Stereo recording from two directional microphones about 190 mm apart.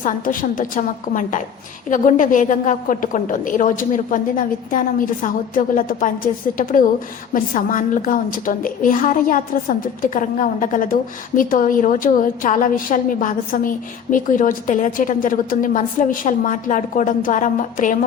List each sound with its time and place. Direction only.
0.0 s a woman's voice: 45° left (ahead or behind)